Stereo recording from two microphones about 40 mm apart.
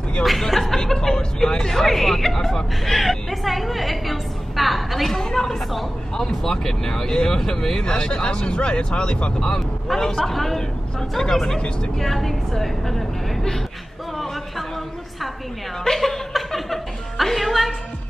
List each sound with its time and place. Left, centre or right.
0.2 s speech: centre
0.7 s a sound: centre
6.1 s speech: centre; by 9.3 s left
9.6 s speech: centre
15.8 s music: centre